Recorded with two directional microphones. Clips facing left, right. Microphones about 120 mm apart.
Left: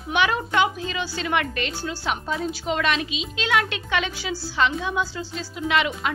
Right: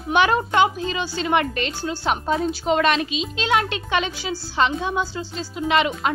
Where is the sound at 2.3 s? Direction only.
40° right (ahead or behind).